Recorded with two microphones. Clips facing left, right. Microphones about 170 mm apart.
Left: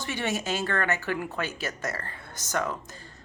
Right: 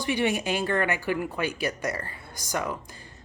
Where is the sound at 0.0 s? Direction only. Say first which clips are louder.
Right 5 dB; 15° right (ahead or behind).